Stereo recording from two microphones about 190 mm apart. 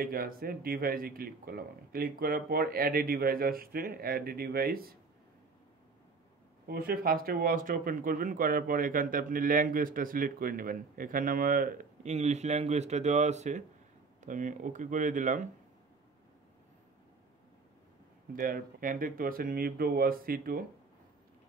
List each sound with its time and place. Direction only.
0.0 s speech: 50° right (ahead or behind)
6.7 s speech: 55° right (ahead or behind)
18.3 s speech: 45° right (ahead or behind)